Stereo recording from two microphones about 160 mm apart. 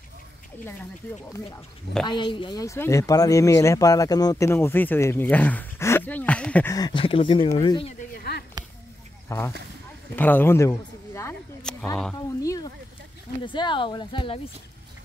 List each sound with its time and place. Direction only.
2.0 s a woman's voice: 30° left (ahead or behind)
2.6 s speech: 20° left (ahead or behind)
6.7 s speech: 25° left (ahead or behind)
8.1 s a sound: 80° left
9.3 s speech: 20° left (ahead or behind)
12.4 s a woman's voice: 20° left (ahead or behind)